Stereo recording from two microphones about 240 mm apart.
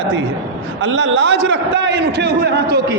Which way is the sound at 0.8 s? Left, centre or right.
Right.